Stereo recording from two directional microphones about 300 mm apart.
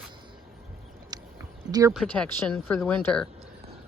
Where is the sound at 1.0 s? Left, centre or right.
Centre.